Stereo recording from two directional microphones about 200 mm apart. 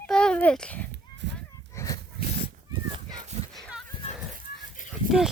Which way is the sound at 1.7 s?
15° left (ahead or behind).